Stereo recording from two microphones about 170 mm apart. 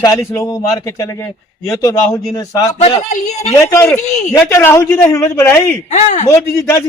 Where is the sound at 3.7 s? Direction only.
15° left (ahead or behind).